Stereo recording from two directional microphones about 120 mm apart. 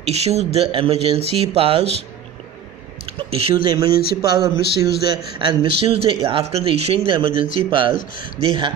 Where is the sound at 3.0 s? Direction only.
55° right (ahead or behind).